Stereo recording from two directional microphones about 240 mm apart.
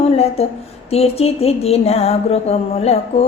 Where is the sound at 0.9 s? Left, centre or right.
Left.